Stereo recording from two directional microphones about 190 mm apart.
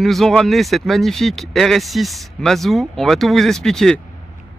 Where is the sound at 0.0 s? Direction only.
Centre (ahead or behind).